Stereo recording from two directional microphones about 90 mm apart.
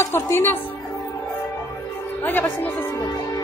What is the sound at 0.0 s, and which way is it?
Speech, 25° left (ahead or behind).